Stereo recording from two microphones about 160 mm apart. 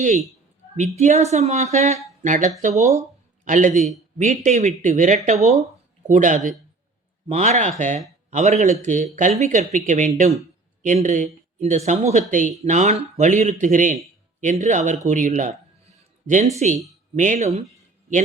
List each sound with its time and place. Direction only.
0.0 s a man's voice: 45° right (ahead or behind)